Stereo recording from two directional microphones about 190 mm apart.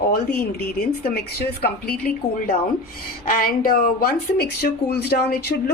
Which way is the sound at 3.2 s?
50° left (ahead or behind).